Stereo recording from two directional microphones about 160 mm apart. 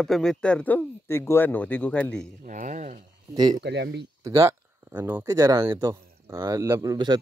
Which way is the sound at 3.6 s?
90° right.